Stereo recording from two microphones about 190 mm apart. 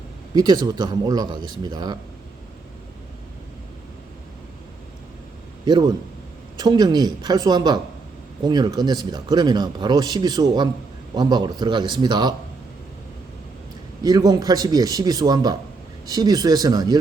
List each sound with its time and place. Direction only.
0.3 s speech: 25° right (ahead or behind)
5.6 s speech: 20° right (ahead or behind)
14.0 s speech: 20° right (ahead or behind)